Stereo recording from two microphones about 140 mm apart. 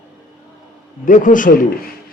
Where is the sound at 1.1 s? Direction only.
70° left (ahead or behind).